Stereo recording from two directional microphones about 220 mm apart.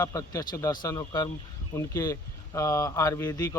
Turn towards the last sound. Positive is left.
turn(degrees=10)  # may be behind; listen again after turning